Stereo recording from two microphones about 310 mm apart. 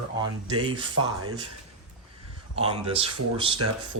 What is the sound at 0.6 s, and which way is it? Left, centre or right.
Speech, centre.